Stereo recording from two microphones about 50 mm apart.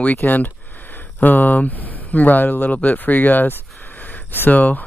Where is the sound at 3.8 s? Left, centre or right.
Left.